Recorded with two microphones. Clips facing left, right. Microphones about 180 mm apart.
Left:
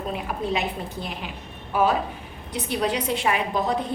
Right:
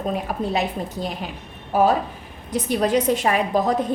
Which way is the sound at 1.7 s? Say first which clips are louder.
Right 4 dB; 40° right (ahead or behind).